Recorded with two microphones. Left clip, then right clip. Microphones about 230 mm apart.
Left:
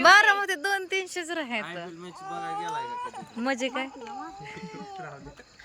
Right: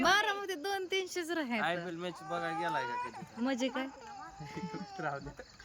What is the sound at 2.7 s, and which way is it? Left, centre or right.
Speech, right.